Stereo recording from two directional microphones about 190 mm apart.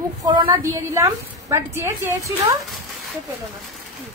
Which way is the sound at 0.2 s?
25° right (ahead or behind).